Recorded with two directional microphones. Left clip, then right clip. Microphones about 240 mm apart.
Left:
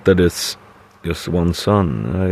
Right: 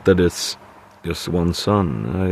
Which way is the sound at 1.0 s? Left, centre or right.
Centre.